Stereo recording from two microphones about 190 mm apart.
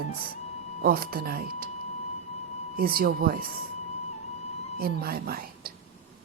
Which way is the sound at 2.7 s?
50° right (ahead or behind).